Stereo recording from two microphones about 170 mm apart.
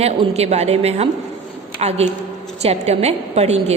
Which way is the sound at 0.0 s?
35° right (ahead or behind).